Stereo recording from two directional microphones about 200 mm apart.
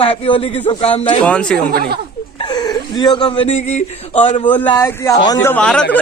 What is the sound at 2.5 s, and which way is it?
Speech, 20° left (ahead or behind).